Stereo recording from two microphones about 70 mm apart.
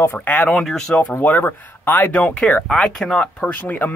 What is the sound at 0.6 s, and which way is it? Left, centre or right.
Speech, centre.